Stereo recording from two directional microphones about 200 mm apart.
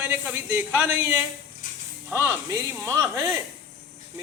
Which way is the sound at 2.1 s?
10° right (ahead or behind).